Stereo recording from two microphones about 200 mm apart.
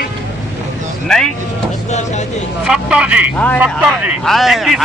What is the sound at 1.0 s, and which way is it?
Speech, 5° left (ahead or behind).